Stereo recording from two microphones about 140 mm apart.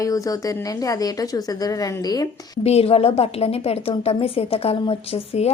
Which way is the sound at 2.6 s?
45° left (ahead or behind).